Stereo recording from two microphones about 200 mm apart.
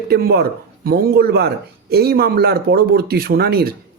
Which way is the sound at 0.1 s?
50° right (ahead or behind).